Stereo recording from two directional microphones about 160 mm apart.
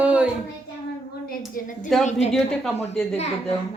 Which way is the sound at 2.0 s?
45° left (ahead or behind).